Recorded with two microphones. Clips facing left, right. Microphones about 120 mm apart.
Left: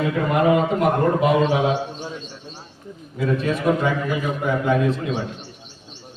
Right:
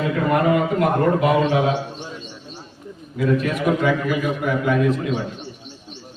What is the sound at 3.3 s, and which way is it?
A man's voice, 25° left (ahead or behind).